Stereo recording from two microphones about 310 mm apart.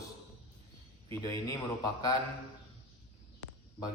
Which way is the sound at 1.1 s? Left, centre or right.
Centre.